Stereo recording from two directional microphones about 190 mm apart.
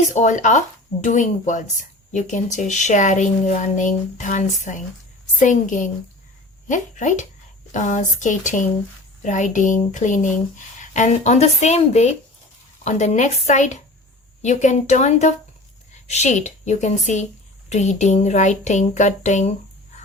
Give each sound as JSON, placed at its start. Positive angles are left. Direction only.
{"t": 0.1, "sound": "speech", "side_deg": 40}